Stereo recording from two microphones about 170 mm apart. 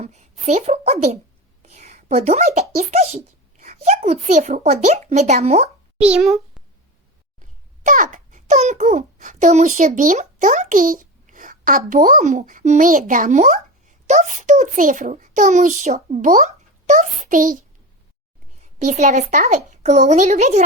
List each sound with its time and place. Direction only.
0.0 s speech: 40° right (ahead or behind)
1.6 s whispering: 40° right (ahead or behind)
2.9 s speech: 40° right (ahead or behind)
6.0 s a child's voice: 5° right (ahead or behind)
7.9 s a child's voice: 50° right (ahead or behind)
18.6 s a child's voice: 45° right (ahead or behind)